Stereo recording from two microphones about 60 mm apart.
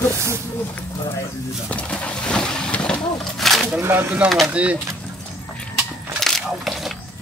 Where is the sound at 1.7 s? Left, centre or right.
Left.